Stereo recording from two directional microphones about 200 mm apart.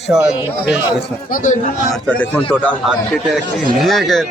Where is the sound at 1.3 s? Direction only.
40° left (ahead or behind).